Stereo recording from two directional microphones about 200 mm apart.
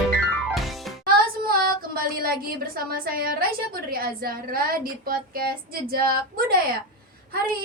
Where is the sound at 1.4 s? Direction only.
50° right (ahead or behind).